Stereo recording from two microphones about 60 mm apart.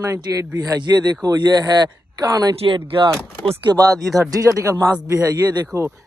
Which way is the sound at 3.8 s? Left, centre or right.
Right.